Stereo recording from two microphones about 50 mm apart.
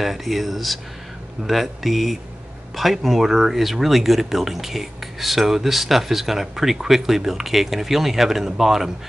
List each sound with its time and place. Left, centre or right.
0.0 s speech: centre